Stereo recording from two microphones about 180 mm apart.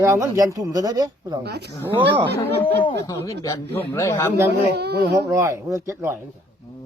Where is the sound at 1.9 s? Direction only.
30° right (ahead or behind).